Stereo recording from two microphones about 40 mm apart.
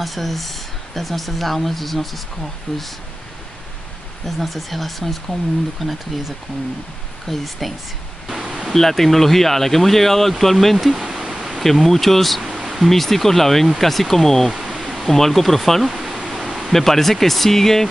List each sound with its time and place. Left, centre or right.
0.0 s speech: centre
2.7 s speech: centre
4.4 s speech: centre
8.5 s a sound: centre
8.7 s speech: centre
11.6 s speech: centre
12.9 s speech: centre
14.5 s a sound: centre
14.8 s speech: centre
16.0 s a sound: centre
16.7 s speech: centre